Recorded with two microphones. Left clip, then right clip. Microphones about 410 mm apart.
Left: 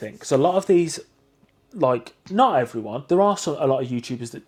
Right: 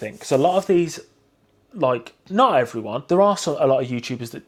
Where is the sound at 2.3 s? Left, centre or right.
Right.